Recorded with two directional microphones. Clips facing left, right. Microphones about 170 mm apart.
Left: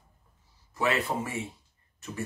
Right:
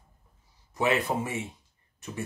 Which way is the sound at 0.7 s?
20° right (ahead or behind).